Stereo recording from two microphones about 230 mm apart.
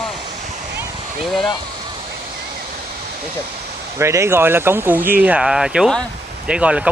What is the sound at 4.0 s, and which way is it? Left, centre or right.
Speech, centre.